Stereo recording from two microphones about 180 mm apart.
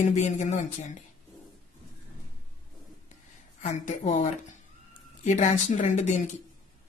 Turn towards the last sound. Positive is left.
turn(degrees=40)  # may be behind; listen again after turning